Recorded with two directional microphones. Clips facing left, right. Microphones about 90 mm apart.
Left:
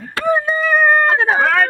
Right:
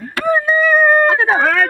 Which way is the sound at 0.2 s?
30° left (ahead or behind).